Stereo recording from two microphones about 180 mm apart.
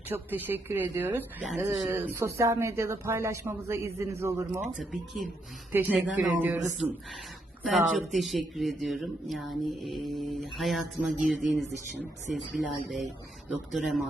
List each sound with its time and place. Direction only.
0.1 s speech: 10° right (ahead or behind)
1.5 s speech: centre (ahead or behind)
1.9 s speech: 15° right (ahead or behind)
4.6 s speech: centre (ahead or behind)
7.6 s speech: centre (ahead or behind)